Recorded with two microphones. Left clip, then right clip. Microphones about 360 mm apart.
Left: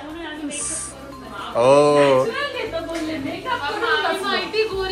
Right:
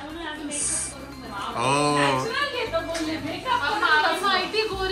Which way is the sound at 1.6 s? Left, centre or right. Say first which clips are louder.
Left 8 dB; centre.